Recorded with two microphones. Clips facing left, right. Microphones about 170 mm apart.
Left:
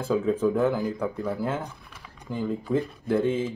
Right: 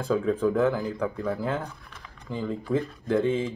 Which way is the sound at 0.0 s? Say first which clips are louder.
Left 1 dB; 5° left (ahead or behind).